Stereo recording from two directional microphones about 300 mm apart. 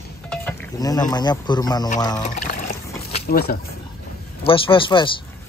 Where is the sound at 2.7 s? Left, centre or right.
Left.